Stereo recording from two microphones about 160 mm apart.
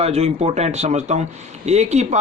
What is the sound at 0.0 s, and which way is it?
Speech, 40° right (ahead or behind).